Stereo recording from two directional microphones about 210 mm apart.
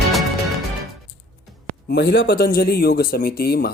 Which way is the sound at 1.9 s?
55° left (ahead or behind).